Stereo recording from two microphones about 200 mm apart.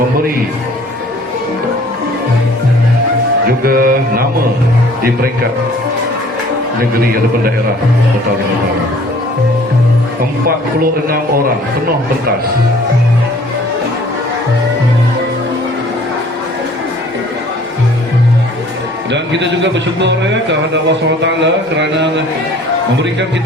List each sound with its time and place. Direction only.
3.4 s mantra: 45° right (ahead or behind)
19.1 s a man's voice: 60° right (ahead or behind)